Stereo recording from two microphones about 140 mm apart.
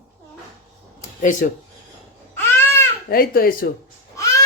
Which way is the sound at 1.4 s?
90° left.